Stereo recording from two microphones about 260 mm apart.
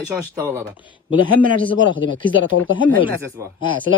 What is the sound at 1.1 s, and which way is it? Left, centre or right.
A man's voice, right.